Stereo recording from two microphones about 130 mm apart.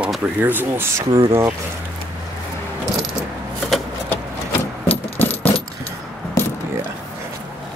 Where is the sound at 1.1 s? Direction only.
40° right (ahead or behind).